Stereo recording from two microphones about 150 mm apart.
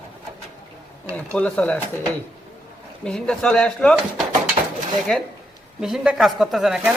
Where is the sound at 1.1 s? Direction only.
10° left (ahead or behind).